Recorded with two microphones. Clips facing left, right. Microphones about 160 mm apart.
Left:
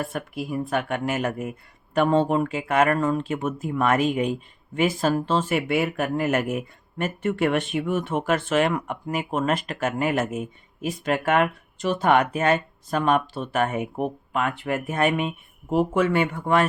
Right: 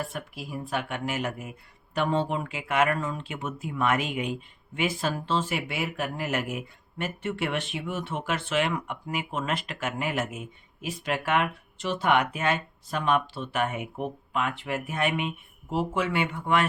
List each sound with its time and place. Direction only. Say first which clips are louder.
0.0 s speech: left 6 dB; 50° left (ahead or behind)